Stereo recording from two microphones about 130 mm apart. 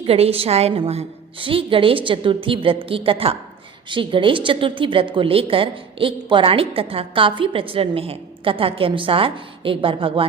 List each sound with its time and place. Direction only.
0.0 s a woman's voice: 50° right (ahead or behind)